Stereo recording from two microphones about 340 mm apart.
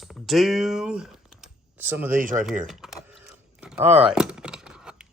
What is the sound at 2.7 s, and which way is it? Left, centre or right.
Mechanisms, centre.